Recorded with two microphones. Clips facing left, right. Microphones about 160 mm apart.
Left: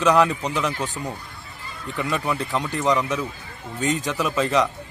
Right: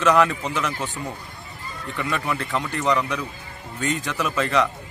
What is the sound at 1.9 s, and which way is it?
Speech, 20° left (ahead or behind).